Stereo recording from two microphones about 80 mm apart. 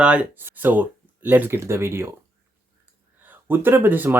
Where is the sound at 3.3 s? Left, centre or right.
Right.